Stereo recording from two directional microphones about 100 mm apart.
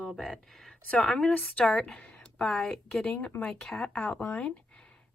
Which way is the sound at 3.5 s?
5° left (ahead or behind).